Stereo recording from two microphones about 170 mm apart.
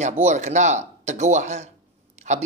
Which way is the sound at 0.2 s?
45° right (ahead or behind).